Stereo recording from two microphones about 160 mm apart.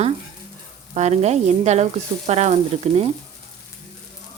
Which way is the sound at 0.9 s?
45° right (ahead or behind).